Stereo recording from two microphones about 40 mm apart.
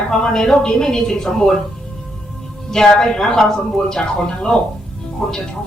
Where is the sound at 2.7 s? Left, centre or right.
Centre.